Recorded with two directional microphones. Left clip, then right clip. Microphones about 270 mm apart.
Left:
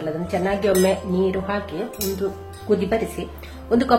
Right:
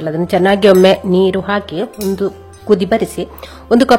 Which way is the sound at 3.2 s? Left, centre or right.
Right.